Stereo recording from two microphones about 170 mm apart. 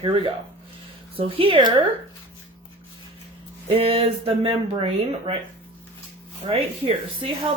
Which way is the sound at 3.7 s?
35° right (ahead or behind).